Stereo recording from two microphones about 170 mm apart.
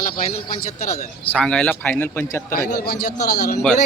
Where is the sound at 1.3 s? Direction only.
5° left (ahead or behind).